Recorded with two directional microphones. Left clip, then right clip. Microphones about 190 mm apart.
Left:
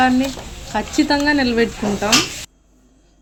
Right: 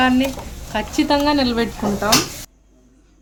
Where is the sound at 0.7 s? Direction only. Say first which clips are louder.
Left 1 dB; 10° left (ahead or behind).